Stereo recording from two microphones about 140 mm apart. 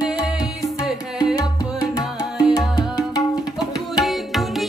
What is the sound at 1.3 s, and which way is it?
Music, 30° left (ahead or behind).